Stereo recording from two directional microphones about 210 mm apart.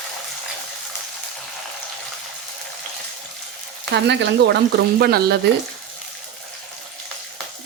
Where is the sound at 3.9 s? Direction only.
55° right (ahead or behind).